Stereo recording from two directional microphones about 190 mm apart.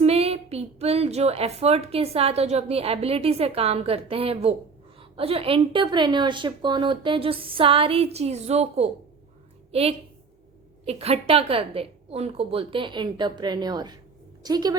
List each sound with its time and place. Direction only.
0.0 s a woman's voice: 30° right (ahead or behind)